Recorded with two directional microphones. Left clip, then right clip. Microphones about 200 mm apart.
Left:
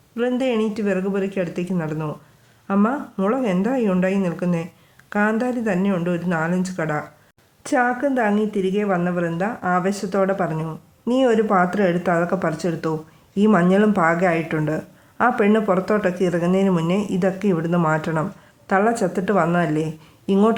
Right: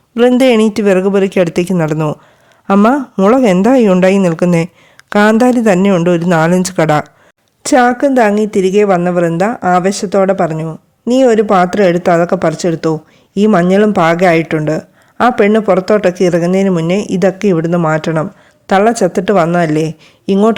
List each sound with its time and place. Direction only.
0.2 s speech: 55° right (ahead or behind)
7.6 s a woman's voice: 45° right (ahead or behind)